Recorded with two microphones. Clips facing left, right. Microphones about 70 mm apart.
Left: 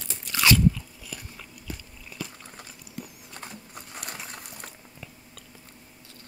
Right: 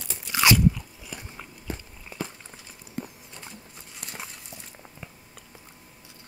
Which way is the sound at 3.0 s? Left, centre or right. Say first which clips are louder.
Right 5 dB; right.